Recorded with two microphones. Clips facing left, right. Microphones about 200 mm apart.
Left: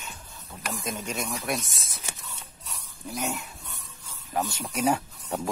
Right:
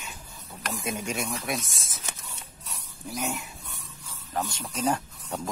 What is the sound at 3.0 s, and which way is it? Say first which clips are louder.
Speech: even; centre (ahead or behind).